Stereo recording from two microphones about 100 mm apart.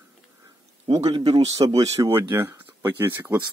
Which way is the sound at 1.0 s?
75° right (ahead or behind).